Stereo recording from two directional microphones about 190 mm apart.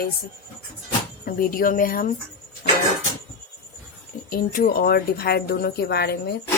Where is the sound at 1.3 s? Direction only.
45° left (ahead or behind).